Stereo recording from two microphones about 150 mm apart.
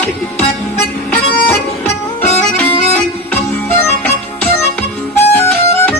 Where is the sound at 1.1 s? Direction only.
10° left (ahead or behind).